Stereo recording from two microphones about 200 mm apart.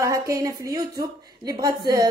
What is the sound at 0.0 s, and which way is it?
A woman's voice, 15° right (ahead or behind).